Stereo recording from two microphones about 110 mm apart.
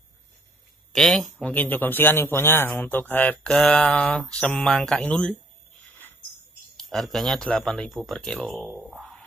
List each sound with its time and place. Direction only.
0.9 s speech: 5° left (ahead or behind)
1.5 s a man's voice: 15° left (ahead or behind)
6.8 s speech: 5° left (ahead or behind)
8.5 s speech: 10° right (ahead or behind)